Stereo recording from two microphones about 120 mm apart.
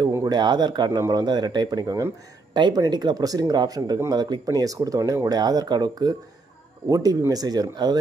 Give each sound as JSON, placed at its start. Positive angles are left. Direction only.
{"t": 0.2, "sound": "speech", "side_deg": -35}